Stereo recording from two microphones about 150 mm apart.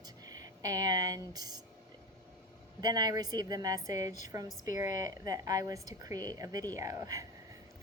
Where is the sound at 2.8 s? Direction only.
30° right (ahead or behind).